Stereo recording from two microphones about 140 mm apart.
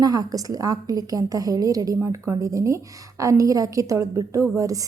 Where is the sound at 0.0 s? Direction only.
25° right (ahead or behind).